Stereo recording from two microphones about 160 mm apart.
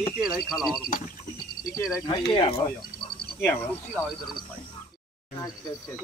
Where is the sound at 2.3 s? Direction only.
35° left (ahead or behind).